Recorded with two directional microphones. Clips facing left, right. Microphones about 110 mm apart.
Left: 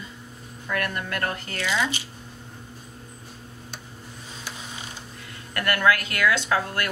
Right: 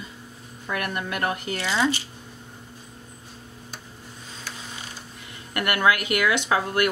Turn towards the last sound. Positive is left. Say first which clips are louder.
# right 3 dB
turn(degrees=-15)  # may be behind; listen again after turning